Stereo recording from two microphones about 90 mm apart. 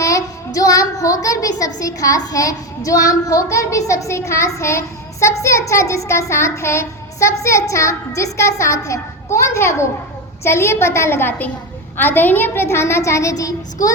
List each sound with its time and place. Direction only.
0.0 s child singing: 40° left (ahead or behind)
10.4 s a woman's voice: 30° left (ahead or behind)
11.9 s child singing: 20° left (ahead or behind); by 13.9 s 40° left (ahead or behind)